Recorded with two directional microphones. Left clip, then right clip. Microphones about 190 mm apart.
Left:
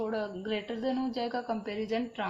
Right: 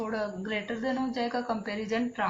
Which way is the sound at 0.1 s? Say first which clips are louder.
Right 1 dB; 45° left (ahead or behind).